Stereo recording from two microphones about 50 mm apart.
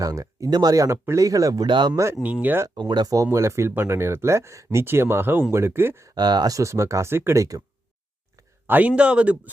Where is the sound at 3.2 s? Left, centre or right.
Right.